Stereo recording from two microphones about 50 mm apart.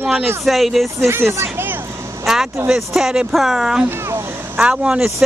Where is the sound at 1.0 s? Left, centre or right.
Right.